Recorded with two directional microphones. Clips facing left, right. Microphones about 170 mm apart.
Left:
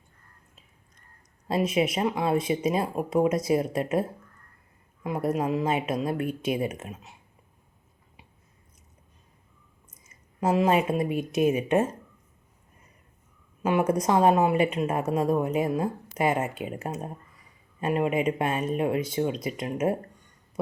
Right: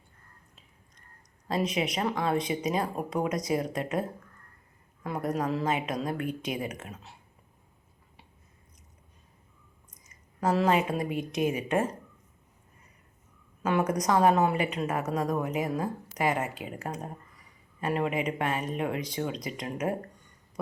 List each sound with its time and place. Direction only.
1.5 s speech: 25° left (ahead or behind)
2.0 s speech: 15° left (ahead or behind)
2.5 s speech: 25° left (ahead or behind)
5.4 s speech: 20° left (ahead or behind)
9.9 s clicking: 25° left (ahead or behind)
10.5 s speech: 20° left (ahead or behind)
13.6 s a woman's voice: 10° left (ahead or behind)
13.8 s speech: 25° left (ahead or behind)
14.3 s speech: 10° left (ahead or behind)
14.8 s speech: 30° left (ahead or behind)